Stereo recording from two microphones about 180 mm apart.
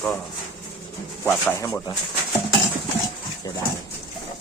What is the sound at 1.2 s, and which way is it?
Speech, 15° left (ahead or behind).